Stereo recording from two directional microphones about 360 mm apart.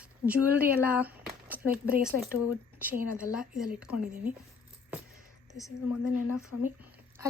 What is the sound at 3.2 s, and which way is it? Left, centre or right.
Speech, centre.